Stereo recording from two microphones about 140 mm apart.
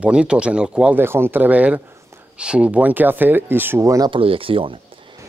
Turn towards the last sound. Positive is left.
turn(degrees=-40)  # may be behind; listen again after turning